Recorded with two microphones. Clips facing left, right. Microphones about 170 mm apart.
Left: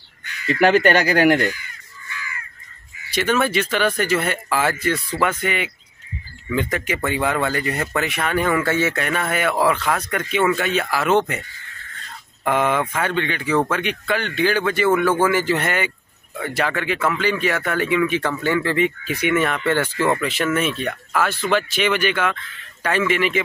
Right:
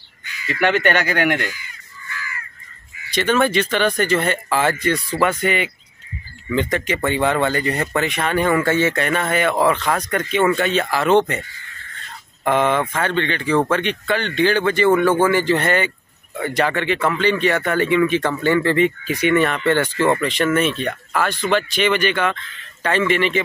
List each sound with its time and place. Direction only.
0.5 s speech: 35° left (ahead or behind)
3.1 s speech: 10° left (ahead or behind)
5.0 s speech: 10° right (ahead or behind)
5.4 s speech: 5° left (ahead or behind)
12.4 s speech: 5° left (ahead or behind)